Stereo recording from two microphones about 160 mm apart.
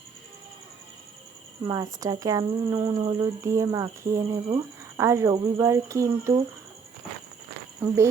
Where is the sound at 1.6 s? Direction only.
25° right (ahead or behind).